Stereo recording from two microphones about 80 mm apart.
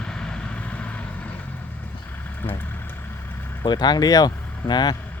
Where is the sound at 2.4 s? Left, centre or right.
Left.